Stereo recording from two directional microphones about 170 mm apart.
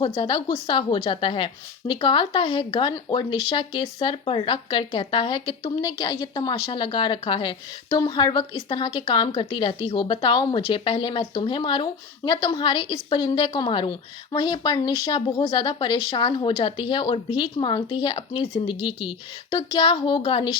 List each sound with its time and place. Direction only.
0.0 s speech: 30° left (ahead or behind)